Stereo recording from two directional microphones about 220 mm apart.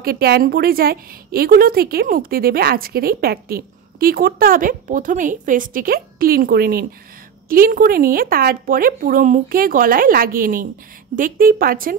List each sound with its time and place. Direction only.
0.0 s a woman's voice: 45° right (ahead or behind)